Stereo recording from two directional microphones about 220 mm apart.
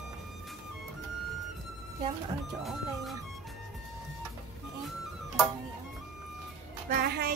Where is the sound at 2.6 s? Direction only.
Centre (ahead or behind).